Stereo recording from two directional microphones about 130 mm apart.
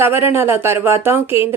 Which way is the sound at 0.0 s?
15° right (ahead or behind).